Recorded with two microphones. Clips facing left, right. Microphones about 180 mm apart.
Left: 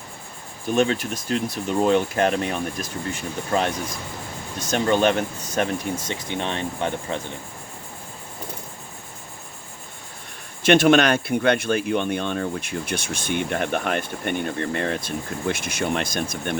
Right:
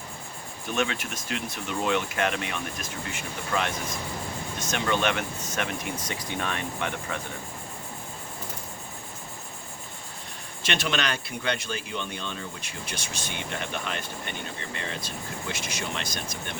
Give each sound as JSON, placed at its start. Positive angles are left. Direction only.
{"t": 0.7, "sound": "speech", "side_deg": 35}
{"t": 10.6, "sound": "speech", "side_deg": 55}